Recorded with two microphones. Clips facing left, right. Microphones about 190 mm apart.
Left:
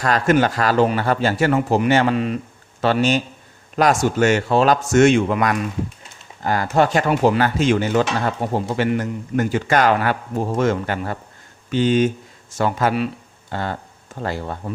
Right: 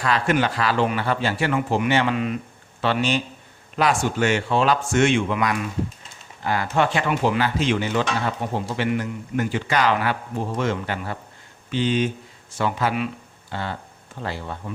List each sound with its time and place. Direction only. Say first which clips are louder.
0.0 s speech: left 4 dB; 45° left (ahead or behind)
13.5 s a sound: left 4 dB; 45° left (ahead or behind)
14.2 s speech: left 5 dB; 45° left (ahead or behind)